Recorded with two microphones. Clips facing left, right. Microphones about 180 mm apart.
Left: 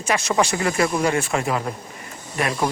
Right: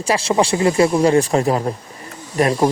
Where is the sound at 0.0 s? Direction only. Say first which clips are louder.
Right 4 dB; 30° right (ahead or behind).